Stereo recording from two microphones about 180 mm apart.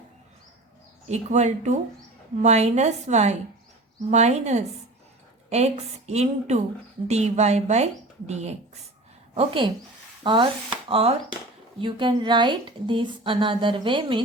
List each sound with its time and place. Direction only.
1.0 s a woman's voice: 40° right (ahead or behind)